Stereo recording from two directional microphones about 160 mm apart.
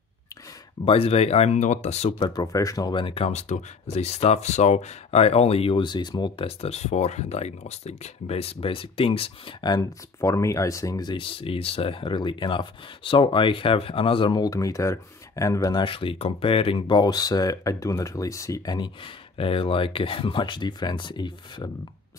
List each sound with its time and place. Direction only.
0.8 s speech: 40° left (ahead or behind); by 15.8 s 20° left (ahead or behind)
15.8 s speech: 35° left (ahead or behind)